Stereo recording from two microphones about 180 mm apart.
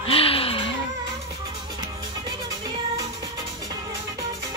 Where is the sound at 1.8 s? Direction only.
25° right (ahead or behind).